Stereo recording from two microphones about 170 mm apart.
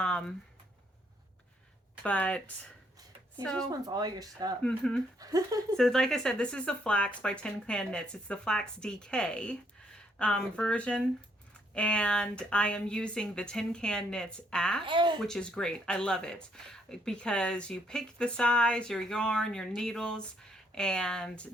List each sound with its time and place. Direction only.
0.0 s speech: 5° left (ahead or behind)
2.0 s speech: 10° left (ahead or behind)
3.4 s speech: 5° left (ahead or behind)
3.7 s speech: 20° right (ahead or behind)
4.6 s speech: 5° left (ahead or behind)
5.2 s speech: 20° right (ahead or behind)
5.7 s speech: centre (ahead or behind)
14.8 s speech: 25° right (ahead or behind)
15.2 s speech: 5° left (ahead or behind)